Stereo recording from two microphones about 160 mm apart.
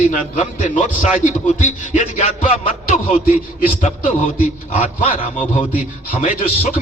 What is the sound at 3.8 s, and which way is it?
A man's voice, 50° left (ahead or behind).